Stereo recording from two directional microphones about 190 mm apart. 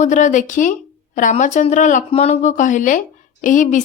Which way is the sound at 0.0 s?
40° left (ahead or behind).